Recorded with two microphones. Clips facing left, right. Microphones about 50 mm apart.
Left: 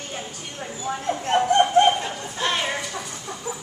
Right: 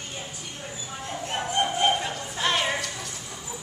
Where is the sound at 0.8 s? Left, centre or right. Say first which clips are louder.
Left 10 dB; left.